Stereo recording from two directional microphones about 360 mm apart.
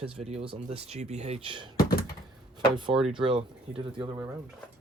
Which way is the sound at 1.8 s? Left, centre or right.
Left.